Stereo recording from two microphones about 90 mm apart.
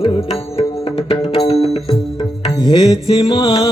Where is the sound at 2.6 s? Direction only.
75° left (ahead or behind).